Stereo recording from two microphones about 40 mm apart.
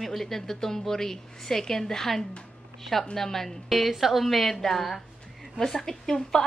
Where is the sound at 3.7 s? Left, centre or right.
Centre.